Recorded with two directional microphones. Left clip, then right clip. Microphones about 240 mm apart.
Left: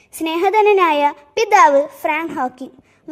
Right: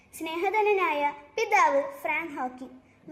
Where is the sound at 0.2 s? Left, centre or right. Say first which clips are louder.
Left 12 dB; left.